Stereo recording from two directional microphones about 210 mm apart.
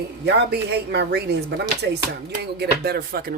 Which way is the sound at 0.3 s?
50° right (ahead or behind).